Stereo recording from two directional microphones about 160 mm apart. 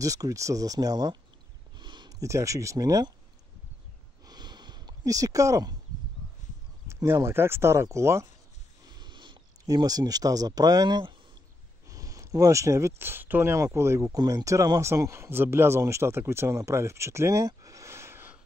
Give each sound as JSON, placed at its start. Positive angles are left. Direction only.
{"t": 0.0, "sound": "speech", "side_deg": -20}
{"t": 4.3, "sound": "a sound", "side_deg": -25}
{"t": 6.9, "sound": "speech", "side_deg": -15}
{"t": 8.8, "sound": "speech", "side_deg": -30}